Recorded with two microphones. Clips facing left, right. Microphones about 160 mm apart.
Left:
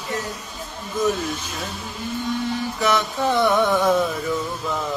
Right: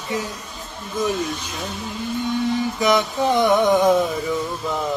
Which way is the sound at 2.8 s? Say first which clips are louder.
Right 1 dB; 15° right (ahead or behind).